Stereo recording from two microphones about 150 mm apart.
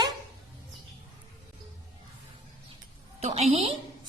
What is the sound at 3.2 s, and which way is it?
Speech, 45° right (ahead or behind).